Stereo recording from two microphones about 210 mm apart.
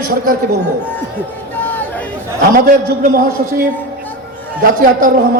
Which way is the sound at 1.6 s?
10° left (ahead or behind).